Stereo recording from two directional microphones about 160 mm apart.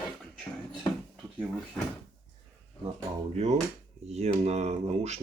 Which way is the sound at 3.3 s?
45° right (ahead or behind).